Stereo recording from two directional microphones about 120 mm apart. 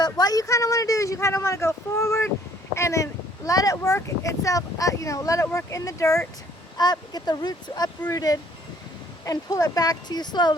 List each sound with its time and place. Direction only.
0.0 s speech: 35° left (ahead or behind)